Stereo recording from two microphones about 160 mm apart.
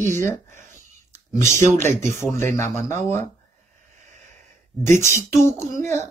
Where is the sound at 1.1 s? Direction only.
20° left (ahead or behind).